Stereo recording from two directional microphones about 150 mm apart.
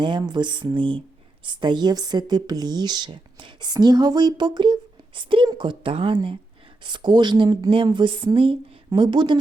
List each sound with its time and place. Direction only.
0.0 s speech: 30° right (ahead or behind)